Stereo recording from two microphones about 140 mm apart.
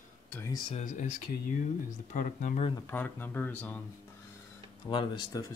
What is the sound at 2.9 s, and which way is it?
Speech, 15° left (ahead or behind).